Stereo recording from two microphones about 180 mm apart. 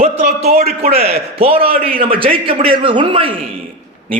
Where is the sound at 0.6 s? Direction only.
35° right (ahead or behind).